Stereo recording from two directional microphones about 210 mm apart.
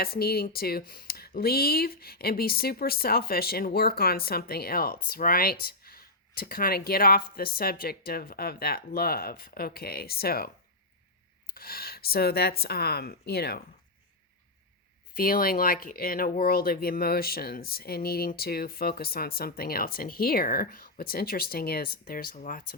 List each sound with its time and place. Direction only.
0.0 s speech: 45° left (ahead or behind)
15.2 s speech: 45° left (ahead or behind)